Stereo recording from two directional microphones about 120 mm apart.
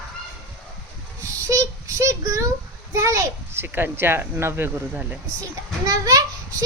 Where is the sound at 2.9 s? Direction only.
25° right (ahead or behind).